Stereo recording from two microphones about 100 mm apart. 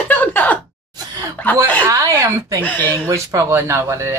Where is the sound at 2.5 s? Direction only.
15° left (ahead or behind).